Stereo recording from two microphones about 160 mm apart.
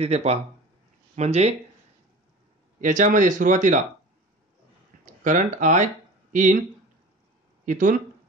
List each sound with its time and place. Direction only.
0.0 s speech: 40° right (ahead or behind)
2.8 s speech: 50° right (ahead or behind)
5.0 s speech: 55° right (ahead or behind)
7.6 s speech: 55° right (ahead or behind)